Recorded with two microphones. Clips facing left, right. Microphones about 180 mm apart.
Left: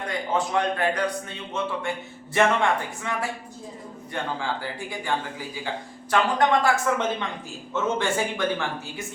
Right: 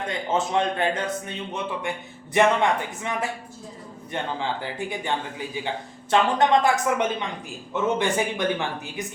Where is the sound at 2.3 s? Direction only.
20° right (ahead or behind).